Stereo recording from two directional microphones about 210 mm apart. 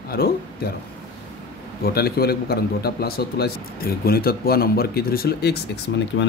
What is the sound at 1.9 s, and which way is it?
A man's voice, 45° left (ahead or behind).